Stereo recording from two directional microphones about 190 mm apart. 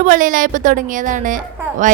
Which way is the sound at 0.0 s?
45° right (ahead or behind).